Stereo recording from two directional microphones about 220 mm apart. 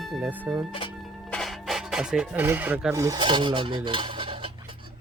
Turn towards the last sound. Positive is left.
turn(degrees=-25)  # may be behind; listen again after turning